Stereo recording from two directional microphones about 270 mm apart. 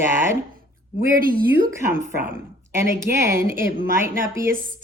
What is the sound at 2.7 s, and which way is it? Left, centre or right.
A woman's voice, centre.